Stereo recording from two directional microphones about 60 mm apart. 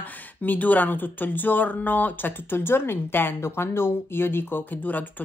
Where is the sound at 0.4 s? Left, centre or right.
Left.